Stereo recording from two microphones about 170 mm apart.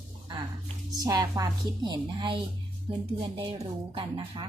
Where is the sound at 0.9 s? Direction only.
20° right (ahead or behind).